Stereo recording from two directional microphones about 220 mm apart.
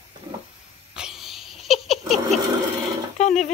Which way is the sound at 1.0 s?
Centre (ahead or behind).